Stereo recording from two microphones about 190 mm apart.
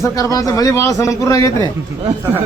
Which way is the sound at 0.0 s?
20° left (ahead or behind).